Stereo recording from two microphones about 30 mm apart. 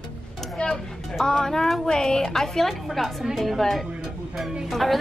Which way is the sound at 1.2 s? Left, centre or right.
Centre.